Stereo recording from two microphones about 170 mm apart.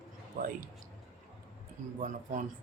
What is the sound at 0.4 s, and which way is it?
Speech, 50° right (ahead or behind).